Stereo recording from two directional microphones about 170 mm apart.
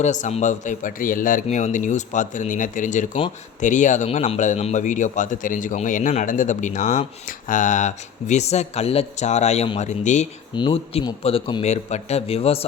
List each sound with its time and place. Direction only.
0.0 s speech: 45° left (ahead or behind)
10.5 s a man's voice: 25° left (ahead or behind)
11.6 s a man's voice: 40° left (ahead or behind)